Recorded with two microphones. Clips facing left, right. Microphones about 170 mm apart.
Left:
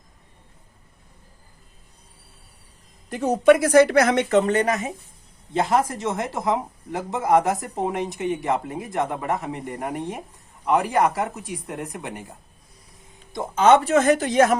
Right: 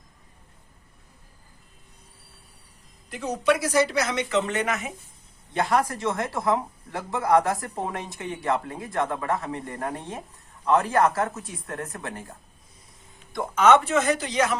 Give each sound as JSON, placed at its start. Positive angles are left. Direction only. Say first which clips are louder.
{"t": 3.1, "sound": "a woman's voice", "louder": "left 8 dB", "side_deg": 50}
{"t": 4.4, "sound": "speech", "louder": "left 6 dB", "side_deg": 35}
{"t": 5.5, "sound": "speech", "louder": "left 2 dB", "side_deg": 25}
{"t": 13.3, "sound": "a woman's voice", "louder": "left 2 dB", "side_deg": 25}